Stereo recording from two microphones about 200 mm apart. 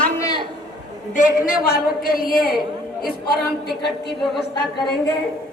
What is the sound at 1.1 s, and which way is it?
A woman's voice, 40° left (ahead or behind).